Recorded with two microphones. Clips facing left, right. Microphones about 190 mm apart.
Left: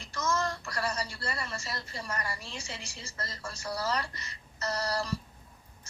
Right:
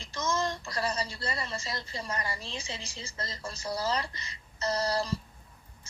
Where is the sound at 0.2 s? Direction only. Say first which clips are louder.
Even; 15° right (ahead or behind).